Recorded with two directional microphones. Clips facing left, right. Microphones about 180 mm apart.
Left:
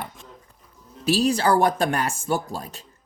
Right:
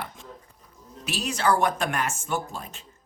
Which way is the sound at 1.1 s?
35° left (ahead or behind).